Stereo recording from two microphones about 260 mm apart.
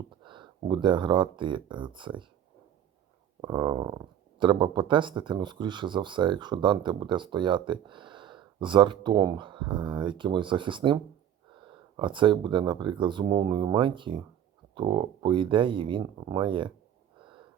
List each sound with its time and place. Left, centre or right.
0.2 s speech: centre
3.4 s speech: centre